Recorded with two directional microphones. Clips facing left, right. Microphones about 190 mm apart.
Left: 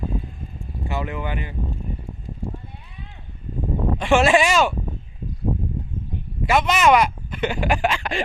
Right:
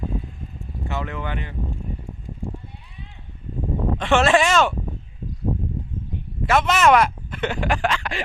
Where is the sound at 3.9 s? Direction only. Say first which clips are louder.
Left 1 dB; 10° left (ahead or behind).